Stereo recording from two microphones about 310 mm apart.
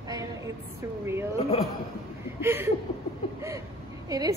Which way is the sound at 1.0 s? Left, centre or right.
Centre.